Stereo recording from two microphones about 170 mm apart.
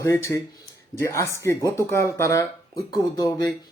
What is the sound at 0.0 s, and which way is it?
Speech, 15° left (ahead or behind).